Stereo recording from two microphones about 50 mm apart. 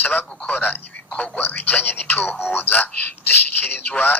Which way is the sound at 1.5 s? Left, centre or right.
Left.